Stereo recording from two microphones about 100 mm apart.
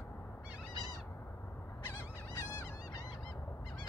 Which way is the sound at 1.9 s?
20° left (ahead or behind).